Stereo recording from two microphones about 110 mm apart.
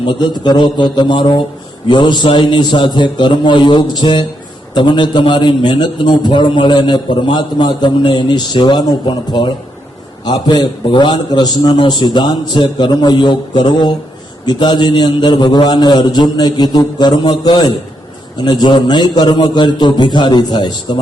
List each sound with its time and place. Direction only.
0.0 s a man's voice: 45° left (ahead or behind)